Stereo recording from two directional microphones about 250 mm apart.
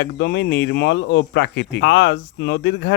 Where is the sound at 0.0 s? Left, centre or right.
Left.